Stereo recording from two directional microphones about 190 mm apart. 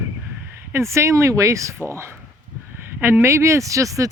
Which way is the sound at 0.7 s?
15° right (ahead or behind).